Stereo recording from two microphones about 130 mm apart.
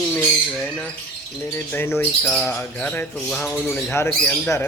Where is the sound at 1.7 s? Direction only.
20° left (ahead or behind).